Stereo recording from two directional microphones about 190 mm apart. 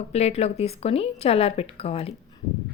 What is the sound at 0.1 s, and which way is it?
A woman's voice, 35° left (ahead or behind).